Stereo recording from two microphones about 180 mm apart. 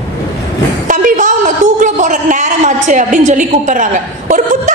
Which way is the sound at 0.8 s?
45° right (ahead or behind).